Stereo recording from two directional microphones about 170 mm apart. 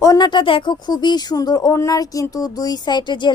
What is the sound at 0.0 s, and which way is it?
Speech, 20° left (ahead or behind).